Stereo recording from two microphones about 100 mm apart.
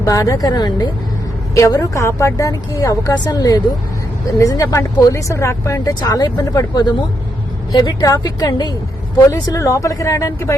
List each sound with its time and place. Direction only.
0.0 s a woman's voice: 35° left (ahead or behind)
5.9 s speech: 40° left (ahead or behind)
7.7 s a woman's voice: 35° left (ahead or behind)